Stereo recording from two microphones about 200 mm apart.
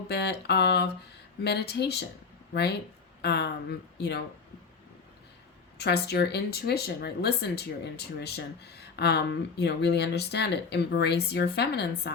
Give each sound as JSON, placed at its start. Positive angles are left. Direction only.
{"t": 0.1, "sound": "speech", "side_deg": 55}
{"t": 5.7, "sound": "speech", "side_deg": 55}